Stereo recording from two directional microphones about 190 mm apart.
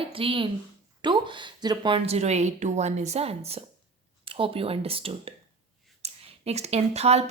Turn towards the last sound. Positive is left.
turn(degrees=-35)  # may be behind; listen again after turning